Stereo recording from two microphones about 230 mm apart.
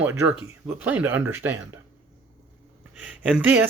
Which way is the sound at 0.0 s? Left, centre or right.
Centre.